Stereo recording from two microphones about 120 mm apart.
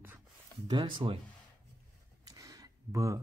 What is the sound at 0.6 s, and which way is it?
Speech, 40° right (ahead or behind).